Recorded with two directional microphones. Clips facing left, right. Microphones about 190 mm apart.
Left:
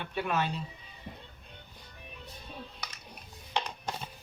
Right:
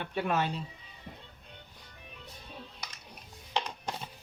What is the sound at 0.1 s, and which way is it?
Speech, 45° right (ahead or behind).